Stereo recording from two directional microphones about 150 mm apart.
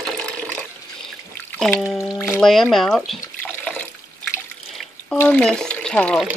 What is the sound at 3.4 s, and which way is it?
Water, 10° left (ahead or behind).